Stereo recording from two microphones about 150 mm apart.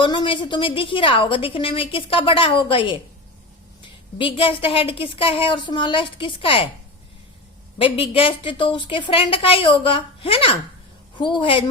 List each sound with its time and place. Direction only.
0.0 s a woman's voice: 30° left (ahead or behind)
4.2 s a woman's voice: 35° left (ahead or behind)
7.8 s a woman's voice: 35° left (ahead or behind)